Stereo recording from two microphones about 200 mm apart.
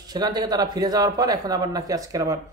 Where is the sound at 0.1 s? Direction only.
20° right (ahead or behind).